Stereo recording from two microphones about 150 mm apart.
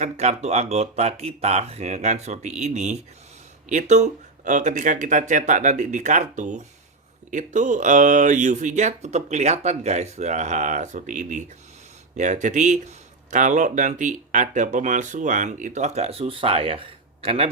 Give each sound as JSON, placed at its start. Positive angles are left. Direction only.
{"t": 0.0, "sound": "speech", "side_deg": -50}